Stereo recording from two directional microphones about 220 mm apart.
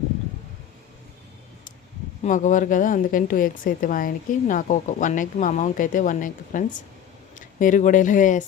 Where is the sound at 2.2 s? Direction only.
35° left (ahead or behind).